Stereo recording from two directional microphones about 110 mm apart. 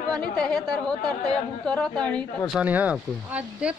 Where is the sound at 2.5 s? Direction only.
10° right (ahead or behind).